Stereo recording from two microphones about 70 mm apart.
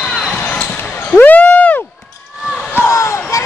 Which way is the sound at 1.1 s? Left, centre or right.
Left.